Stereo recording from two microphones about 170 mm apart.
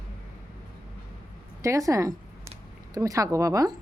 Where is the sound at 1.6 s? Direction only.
20° right (ahead or behind).